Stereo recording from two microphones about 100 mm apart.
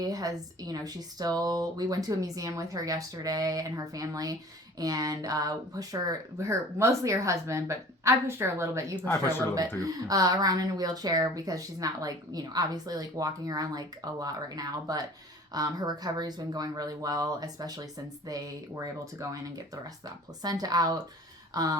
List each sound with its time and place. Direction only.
0.0 s speech: 40° right (ahead or behind)
9.1 s speech: 20° left (ahead or behind)
9.8 s speech: 40° right (ahead or behind)
21.5 s a sound: 40° right (ahead or behind)